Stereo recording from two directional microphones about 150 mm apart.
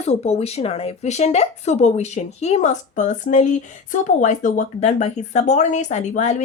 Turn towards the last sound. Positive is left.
turn(degrees=50)  # may be behind; listen again after turning